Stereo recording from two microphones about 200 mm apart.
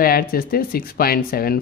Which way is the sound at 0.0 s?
50° left (ahead or behind).